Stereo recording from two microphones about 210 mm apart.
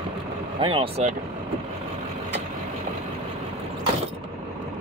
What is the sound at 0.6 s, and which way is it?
Speech, 25° right (ahead or behind).